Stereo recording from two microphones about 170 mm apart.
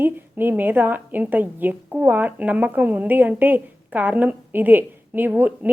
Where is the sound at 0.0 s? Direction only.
10° right (ahead or behind).